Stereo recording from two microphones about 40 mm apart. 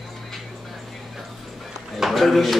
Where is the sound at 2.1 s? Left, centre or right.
Centre.